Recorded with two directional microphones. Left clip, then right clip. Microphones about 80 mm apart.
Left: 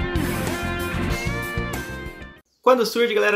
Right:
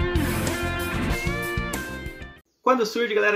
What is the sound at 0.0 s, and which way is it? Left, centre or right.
Music, centre.